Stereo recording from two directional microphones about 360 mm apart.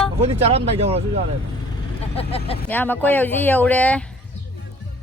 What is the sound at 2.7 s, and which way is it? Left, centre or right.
Speech, centre.